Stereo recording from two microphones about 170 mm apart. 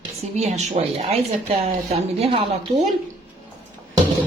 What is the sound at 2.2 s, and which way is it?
Speech, 35° right (ahead or behind).